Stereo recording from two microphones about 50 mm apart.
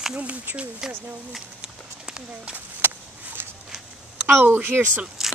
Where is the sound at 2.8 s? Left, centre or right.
Right.